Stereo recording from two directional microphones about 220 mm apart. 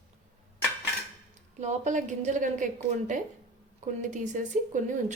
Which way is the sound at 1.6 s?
35° right (ahead or behind).